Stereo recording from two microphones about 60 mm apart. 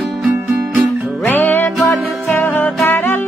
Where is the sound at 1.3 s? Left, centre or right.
Left.